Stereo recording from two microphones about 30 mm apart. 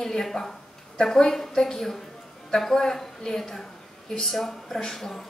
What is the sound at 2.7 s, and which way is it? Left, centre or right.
A woman's voice, centre.